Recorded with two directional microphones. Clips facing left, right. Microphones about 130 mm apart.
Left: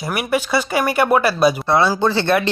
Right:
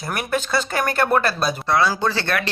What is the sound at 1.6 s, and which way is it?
Speech, 25° left (ahead or behind).